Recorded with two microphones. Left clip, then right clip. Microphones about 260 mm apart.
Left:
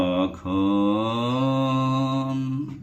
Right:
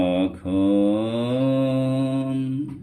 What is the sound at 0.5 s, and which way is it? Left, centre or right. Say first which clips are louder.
Mantra: right 2 dB; centre.